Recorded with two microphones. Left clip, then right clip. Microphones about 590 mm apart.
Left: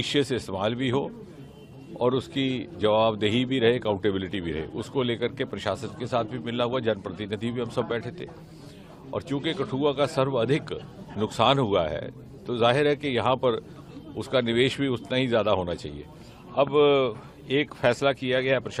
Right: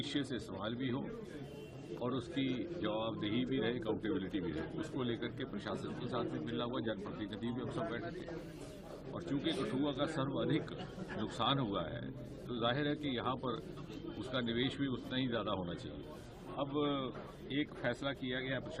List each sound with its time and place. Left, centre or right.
0.0 s a man's voice: left
9.1 s a man's voice: left